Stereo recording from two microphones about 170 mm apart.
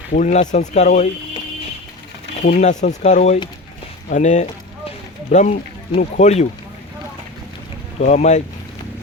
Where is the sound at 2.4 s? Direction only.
50° left (ahead or behind).